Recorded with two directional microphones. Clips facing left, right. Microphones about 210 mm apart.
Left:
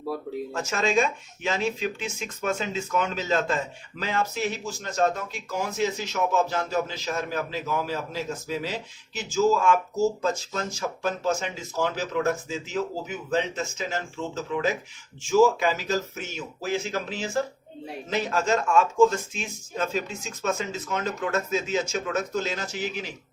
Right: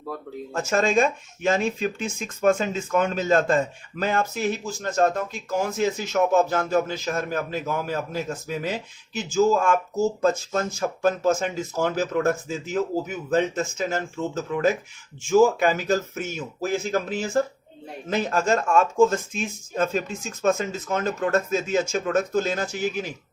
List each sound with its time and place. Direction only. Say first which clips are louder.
0.5 s speech: right 4 dB; 50° right (ahead or behind)